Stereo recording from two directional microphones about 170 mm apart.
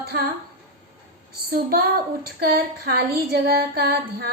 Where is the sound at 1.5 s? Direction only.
60° right (ahead or behind).